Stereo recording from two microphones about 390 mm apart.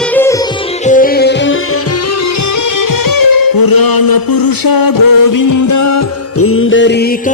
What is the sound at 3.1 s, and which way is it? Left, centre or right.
Music, left.